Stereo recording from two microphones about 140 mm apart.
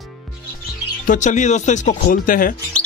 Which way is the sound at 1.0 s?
60° left (ahead or behind).